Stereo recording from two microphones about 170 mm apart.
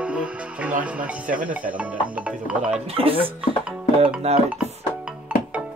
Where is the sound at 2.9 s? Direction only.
35° right (ahead or behind).